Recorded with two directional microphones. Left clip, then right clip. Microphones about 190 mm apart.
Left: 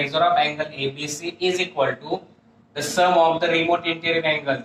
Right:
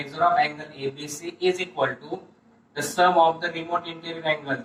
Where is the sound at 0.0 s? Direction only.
40° left (ahead or behind).